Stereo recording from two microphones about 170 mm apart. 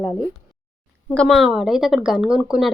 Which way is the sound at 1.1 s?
Centre (ahead or behind).